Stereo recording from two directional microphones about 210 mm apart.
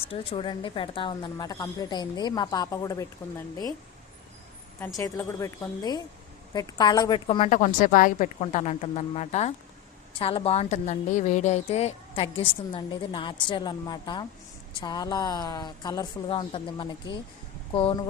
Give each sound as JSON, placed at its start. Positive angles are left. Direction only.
{"t": 0.1, "sound": "a woman's voice", "side_deg": 25}
{"t": 4.9, "sound": "a woman's voice", "side_deg": 15}